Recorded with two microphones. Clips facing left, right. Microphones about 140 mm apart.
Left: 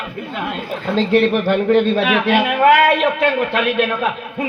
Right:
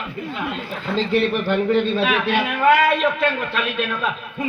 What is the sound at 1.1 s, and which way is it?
A man's voice, 60° left (ahead or behind).